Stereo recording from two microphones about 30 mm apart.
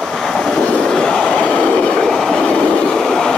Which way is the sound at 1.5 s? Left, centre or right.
Left.